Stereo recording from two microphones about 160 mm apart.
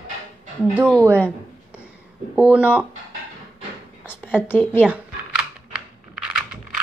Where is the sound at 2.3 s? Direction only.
10° right (ahead or behind).